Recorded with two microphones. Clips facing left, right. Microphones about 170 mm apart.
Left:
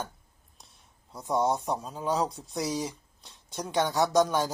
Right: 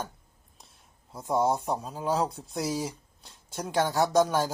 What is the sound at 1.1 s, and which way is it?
Speech, 5° right (ahead or behind).